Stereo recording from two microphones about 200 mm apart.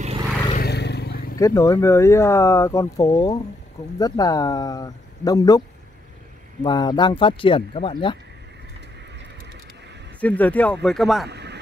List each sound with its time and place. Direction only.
0.6 s vehicle: 55° left (ahead or behind)
1.4 s speech: 15° left (ahead or behind)
6.6 s speech: 20° left (ahead or behind)
10.2 s speech: 5° left (ahead or behind)
11.2 s a sound: 60° right (ahead or behind)